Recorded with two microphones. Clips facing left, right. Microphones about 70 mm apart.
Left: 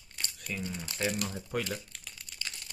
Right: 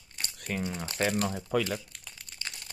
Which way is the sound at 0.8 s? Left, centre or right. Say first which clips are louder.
Right 4 dB; right.